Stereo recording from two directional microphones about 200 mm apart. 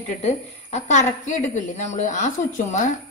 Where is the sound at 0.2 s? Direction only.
35° left (ahead or behind).